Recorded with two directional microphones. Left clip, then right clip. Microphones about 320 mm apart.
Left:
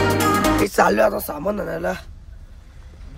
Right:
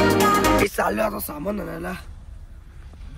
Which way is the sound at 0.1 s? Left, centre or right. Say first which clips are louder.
Right 1 dB; centre.